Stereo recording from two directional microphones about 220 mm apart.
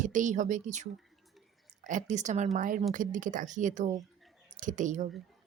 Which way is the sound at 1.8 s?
35° right (ahead or behind).